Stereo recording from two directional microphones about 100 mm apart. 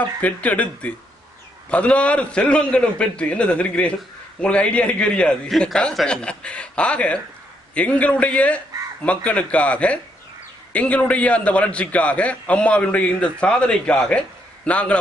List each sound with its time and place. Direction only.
0.2 s a man's voice: 15° left (ahead or behind)